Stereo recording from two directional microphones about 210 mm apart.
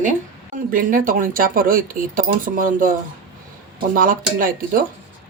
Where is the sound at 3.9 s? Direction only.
40° right (ahead or behind).